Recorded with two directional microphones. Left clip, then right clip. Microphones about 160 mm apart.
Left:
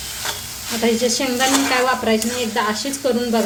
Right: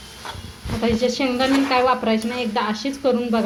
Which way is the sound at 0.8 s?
25° right (ahead or behind).